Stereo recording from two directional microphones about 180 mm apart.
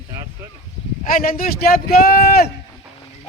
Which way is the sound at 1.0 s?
50° left (ahead or behind).